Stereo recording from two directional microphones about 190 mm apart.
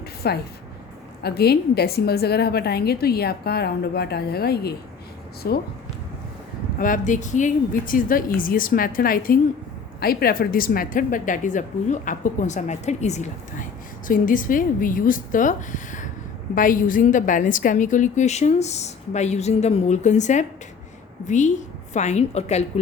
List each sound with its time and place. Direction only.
0.2 s a woman's voice: 55° left (ahead or behind)
6.7 s a woman's voice: 45° left (ahead or behind)